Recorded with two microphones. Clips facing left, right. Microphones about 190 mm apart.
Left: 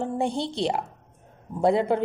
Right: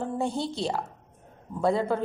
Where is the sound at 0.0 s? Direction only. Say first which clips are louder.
Left 2 dB; 20° left (ahead or behind).